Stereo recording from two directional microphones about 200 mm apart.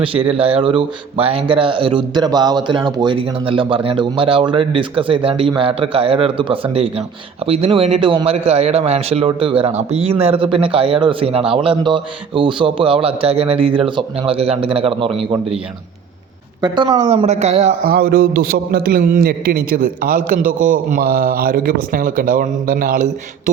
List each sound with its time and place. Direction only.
0.0 s speech: 25° right (ahead or behind)
16.6 s speech: 20° right (ahead or behind)
17.8 s a man's voice: 50° right (ahead or behind)